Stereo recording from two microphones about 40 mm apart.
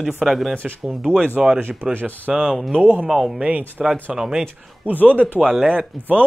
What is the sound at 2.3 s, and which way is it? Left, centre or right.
Speech, centre.